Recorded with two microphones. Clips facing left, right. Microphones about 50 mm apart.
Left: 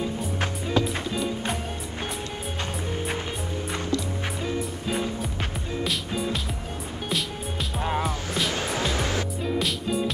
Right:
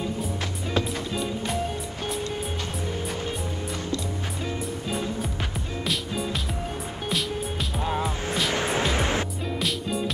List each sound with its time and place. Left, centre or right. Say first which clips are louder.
0.7 s music: left 1 dB; centre
5.9 s music: right 1 dB; centre
8.5 s music: right 4 dB; right
9.6 s music: even; centre